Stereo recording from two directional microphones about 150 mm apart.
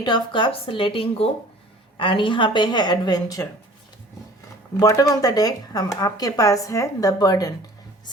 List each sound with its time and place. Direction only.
0.0 s a woman's voice: 30° left (ahead or behind)
4.8 s speech: 25° left (ahead or behind)